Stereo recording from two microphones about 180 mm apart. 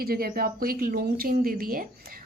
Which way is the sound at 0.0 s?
55° right (ahead or behind).